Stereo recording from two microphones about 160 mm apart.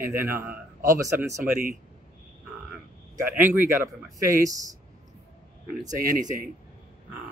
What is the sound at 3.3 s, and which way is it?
Speech, 10° right (ahead or behind).